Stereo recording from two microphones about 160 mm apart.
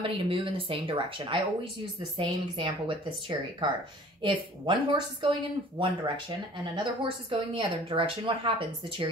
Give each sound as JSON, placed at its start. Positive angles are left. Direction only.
{"t": 0.0, "sound": "speech", "side_deg": -35}